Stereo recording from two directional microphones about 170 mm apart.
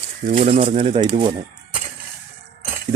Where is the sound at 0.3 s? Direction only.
40° right (ahead or behind).